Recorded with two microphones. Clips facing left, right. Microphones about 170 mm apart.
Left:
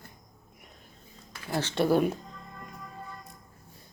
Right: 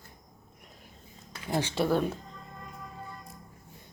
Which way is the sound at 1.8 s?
10° left (ahead or behind).